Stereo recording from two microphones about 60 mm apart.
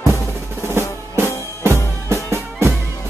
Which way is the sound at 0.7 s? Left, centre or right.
Right.